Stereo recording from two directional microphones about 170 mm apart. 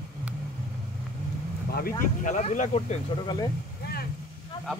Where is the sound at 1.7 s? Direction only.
60° left (ahead or behind); by 3.0 s 40° left (ahead or behind).